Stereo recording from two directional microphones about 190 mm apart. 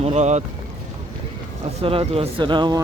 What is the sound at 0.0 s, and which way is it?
Speech, 35° right (ahead or behind).